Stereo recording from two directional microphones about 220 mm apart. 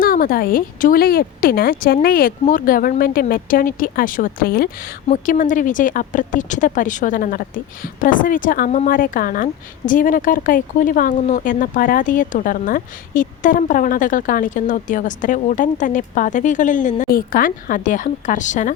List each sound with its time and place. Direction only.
0.0 s a woman's voice: 40° left (ahead or behind)